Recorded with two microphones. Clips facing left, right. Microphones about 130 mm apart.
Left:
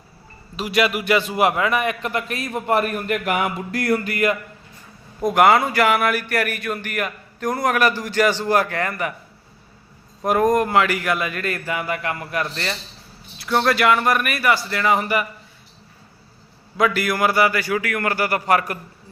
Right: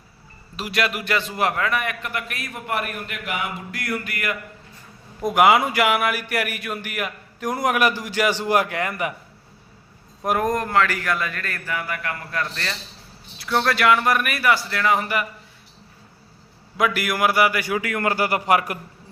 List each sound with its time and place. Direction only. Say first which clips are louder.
0.5 s a man's voice: left 4 dB; centre (ahead or behind); by 4.4 s 30° left (ahead or behind)
5.2 s speech: left 1 dB; 5° right (ahead or behind)
10.2 s a man's voice: left 4 dB; centre (ahead or behind)
10.6 s a man's voice: left 3 dB; 15° left (ahead or behind)
13.4 s a man's voice: left 2 dB; centre (ahead or behind)
16.7 s speech: left 2 dB; 5° right (ahead or behind)